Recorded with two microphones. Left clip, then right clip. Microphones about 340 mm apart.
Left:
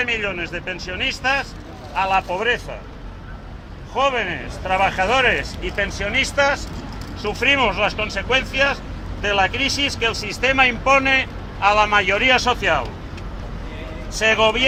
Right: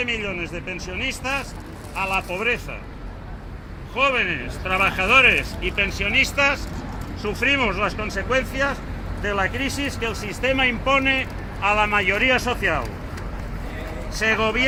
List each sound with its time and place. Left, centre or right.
0.0 s speech: left
3.9 s speech: centre